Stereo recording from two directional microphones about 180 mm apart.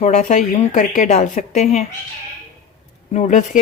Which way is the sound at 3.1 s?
40° left (ahead or behind).